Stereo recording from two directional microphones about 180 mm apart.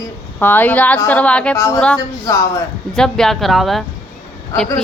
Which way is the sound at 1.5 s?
15° left (ahead or behind).